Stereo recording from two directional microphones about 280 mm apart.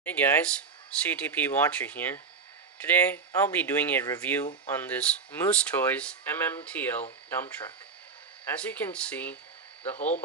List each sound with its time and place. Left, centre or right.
0.0 s speech: centre
3.3 s speech: centre
9.9 s speech: left